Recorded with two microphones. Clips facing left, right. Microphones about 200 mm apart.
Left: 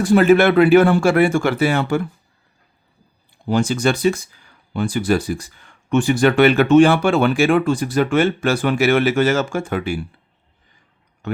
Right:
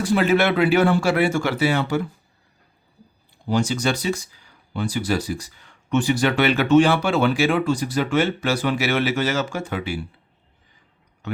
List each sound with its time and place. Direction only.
0.0 s speech: 50° left (ahead or behind)
3.5 s speech: 55° left (ahead or behind)